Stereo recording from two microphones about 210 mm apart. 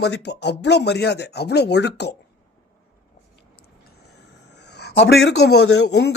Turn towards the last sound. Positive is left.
turn(degrees=55)  # may be behind; listen again after turning